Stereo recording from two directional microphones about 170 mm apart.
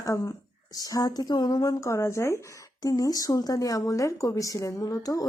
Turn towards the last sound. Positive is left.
turn(degrees=20)  # may be behind; listen again after turning